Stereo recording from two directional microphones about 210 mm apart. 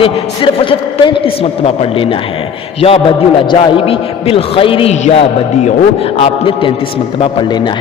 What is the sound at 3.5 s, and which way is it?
A man's voice, 25° left (ahead or behind).